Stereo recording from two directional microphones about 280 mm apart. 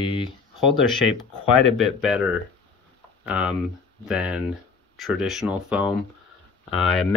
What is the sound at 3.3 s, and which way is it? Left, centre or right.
Speech, centre.